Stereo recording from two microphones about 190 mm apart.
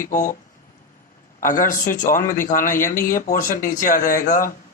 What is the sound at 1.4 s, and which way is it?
Speech, 45° left (ahead or behind).